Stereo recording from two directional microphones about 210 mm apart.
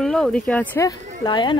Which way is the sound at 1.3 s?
20° left (ahead or behind).